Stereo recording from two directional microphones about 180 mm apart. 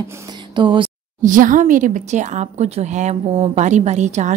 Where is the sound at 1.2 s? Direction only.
45° right (ahead or behind).